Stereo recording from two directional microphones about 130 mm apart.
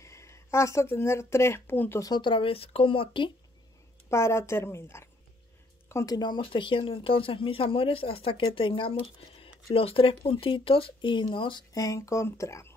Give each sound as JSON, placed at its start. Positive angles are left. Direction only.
{"t": 0.0, "sound": "speech", "side_deg": 20}
{"t": 4.1, "sound": "speech", "side_deg": 20}
{"t": 11.7, "sound": "speech", "side_deg": 25}